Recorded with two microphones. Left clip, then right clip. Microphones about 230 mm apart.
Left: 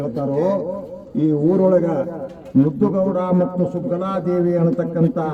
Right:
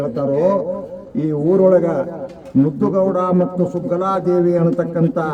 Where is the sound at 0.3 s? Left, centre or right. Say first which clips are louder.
Right 3 dB; centre.